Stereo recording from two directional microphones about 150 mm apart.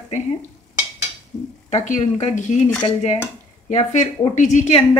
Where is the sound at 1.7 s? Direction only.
55° left (ahead or behind).